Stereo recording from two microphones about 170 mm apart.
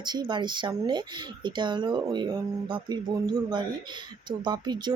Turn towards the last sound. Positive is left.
turn(degrees=-25)  # may be behind; listen again after turning